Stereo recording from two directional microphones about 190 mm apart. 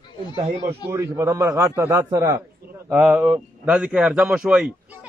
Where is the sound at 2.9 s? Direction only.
5° right (ahead or behind).